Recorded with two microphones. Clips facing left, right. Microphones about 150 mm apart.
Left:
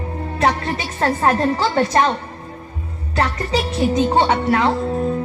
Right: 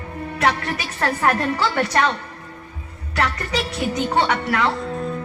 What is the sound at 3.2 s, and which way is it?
Speech, 25° left (ahead or behind).